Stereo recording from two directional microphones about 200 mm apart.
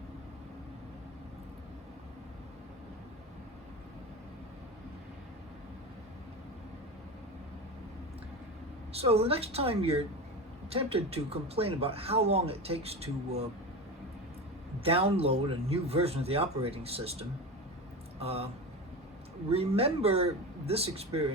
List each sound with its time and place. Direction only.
8.9 s speech: 30° right (ahead or behind)
14.8 s speech: 30° right (ahead or behind)
19.5 s speech: 30° right (ahead or behind)